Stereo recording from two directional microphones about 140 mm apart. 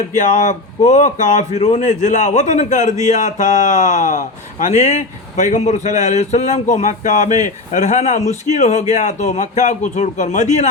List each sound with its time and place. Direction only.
0.1 s a man's voice: 60° left (ahead or behind)